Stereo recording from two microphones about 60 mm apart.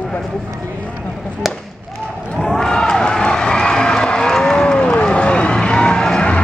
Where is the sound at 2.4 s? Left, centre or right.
Centre.